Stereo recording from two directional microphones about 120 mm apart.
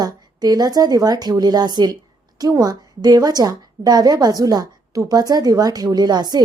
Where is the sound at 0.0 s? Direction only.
35° right (ahead or behind).